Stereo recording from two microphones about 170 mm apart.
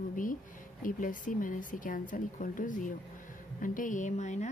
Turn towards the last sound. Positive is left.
turn(degrees=45)  # may be behind; listen again after turning